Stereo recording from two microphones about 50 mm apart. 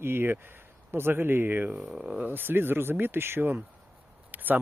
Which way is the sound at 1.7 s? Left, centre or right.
Centre.